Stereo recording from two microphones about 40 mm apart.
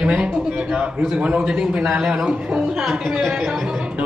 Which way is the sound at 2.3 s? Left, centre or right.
Right.